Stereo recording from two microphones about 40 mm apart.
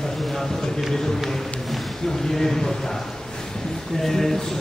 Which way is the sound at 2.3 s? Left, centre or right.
Centre.